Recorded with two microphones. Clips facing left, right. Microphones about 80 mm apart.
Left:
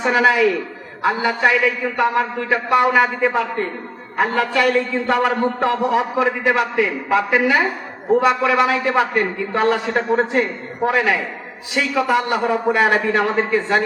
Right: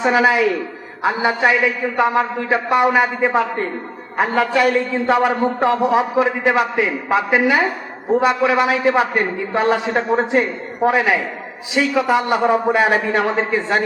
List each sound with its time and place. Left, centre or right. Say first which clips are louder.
0.0 s a woman's voice: even; centre